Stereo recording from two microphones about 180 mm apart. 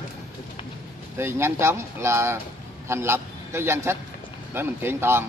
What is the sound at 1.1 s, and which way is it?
A man's voice, 15° right (ahead or behind).